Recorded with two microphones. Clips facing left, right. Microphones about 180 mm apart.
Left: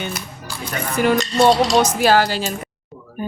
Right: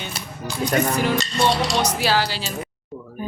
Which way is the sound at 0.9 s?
50° left (ahead or behind).